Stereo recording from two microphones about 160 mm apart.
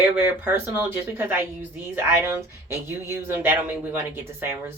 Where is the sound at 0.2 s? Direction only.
10° right (ahead or behind).